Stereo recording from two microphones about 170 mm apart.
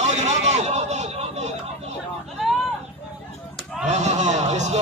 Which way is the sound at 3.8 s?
45° right (ahead or behind).